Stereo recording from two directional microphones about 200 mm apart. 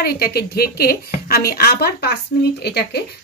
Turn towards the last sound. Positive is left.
turn(degrees=55)  # may be behind; listen again after turning